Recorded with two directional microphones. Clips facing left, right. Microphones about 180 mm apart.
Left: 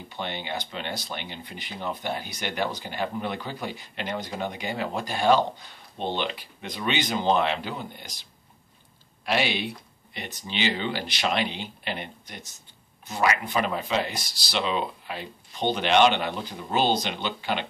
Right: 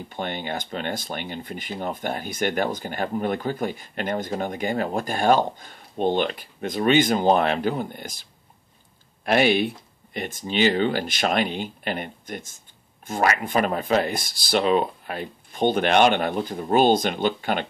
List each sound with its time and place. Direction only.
0.1 s speech: 50° right (ahead or behind)